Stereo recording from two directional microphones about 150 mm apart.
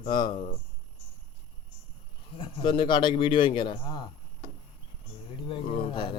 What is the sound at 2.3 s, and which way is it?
A man's voice, 35° left (ahead or behind).